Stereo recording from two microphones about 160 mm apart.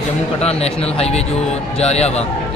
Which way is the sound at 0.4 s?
40° left (ahead or behind).